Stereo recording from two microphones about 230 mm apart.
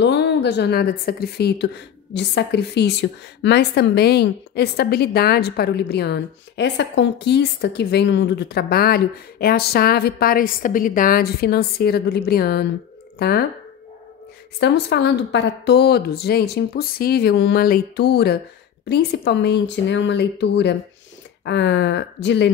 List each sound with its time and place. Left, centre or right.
0.0 s a woman's voice: left
14.6 s a woman's voice: left